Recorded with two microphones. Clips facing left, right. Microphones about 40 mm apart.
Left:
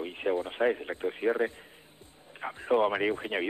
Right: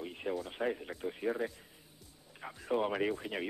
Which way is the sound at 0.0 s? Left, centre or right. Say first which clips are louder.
Left 8 dB; left.